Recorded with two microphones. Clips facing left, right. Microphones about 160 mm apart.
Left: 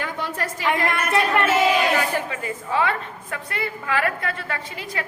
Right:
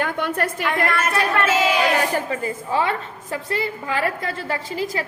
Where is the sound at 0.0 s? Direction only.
60° right (ahead or behind).